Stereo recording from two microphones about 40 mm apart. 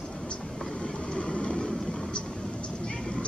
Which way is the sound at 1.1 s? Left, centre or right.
Left.